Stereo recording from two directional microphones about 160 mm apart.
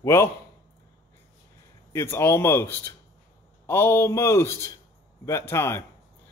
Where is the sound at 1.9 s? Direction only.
15° left (ahead or behind).